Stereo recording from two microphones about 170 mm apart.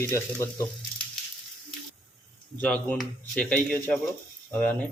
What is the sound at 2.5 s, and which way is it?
Speech, 10° left (ahead or behind).